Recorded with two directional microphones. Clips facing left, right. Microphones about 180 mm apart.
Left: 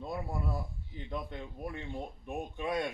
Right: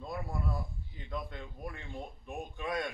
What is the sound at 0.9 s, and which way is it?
A man's voice, 25° left (ahead or behind).